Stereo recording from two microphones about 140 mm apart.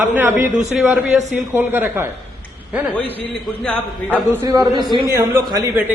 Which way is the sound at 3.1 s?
10° left (ahead or behind).